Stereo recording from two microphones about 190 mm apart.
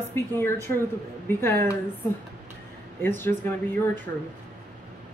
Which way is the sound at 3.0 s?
10° left (ahead or behind).